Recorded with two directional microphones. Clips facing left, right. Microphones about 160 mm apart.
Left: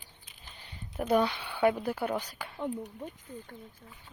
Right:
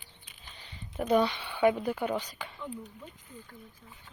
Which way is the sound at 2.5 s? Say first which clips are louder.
Left 7 dB; 65° left (ahead or behind).